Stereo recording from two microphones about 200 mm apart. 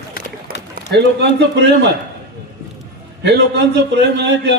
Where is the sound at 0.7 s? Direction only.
55° right (ahead or behind).